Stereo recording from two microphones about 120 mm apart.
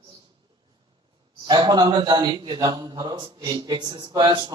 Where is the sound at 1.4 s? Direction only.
35° right (ahead or behind).